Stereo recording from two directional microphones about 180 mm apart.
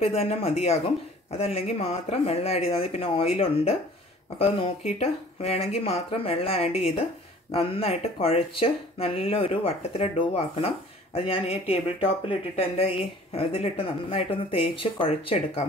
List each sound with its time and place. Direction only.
0.0 s speech: 35° left (ahead or behind)